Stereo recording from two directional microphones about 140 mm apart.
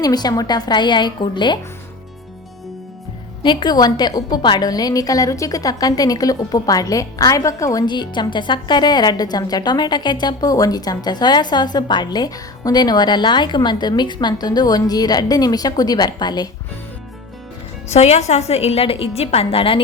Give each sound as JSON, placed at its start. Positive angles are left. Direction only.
{"t": 0.0, "sound": "a woman's voice", "side_deg": 30}
{"t": 3.4, "sound": "a woman's voice", "side_deg": 30}
{"t": 17.9, "sound": "a woman's voice", "side_deg": 50}